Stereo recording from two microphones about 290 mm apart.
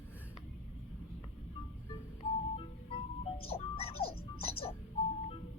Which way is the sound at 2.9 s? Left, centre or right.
Centre.